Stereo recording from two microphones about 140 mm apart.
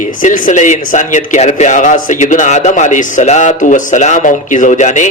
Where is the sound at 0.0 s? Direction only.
65° left (ahead or behind).